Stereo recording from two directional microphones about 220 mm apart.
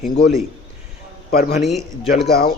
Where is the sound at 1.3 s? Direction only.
45° left (ahead or behind).